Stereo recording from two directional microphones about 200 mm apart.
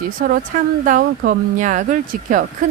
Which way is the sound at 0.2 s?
45° right (ahead or behind).